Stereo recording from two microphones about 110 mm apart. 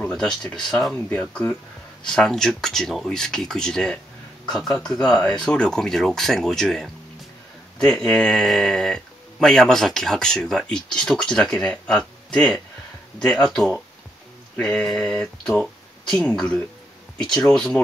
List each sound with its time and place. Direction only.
0.0 s speech: 5° left (ahead or behind)
0.9 s speech: 15° left (ahead or behind)